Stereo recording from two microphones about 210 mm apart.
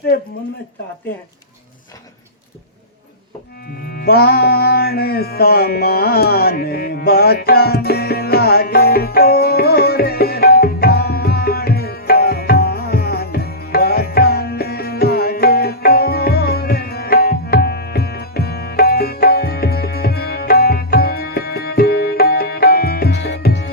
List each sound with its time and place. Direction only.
0.1 s speech: 45° left (ahead or behind)
3.8 s music: 45° left (ahead or behind)